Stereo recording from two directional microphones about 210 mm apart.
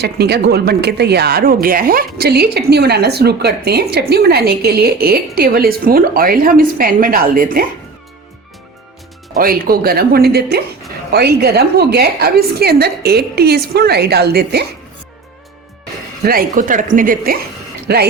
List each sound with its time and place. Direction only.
0.0 s speech: 50° right (ahead or behind)
9.4 s speech: 45° right (ahead or behind)
16.2 s speech: 45° right (ahead or behind)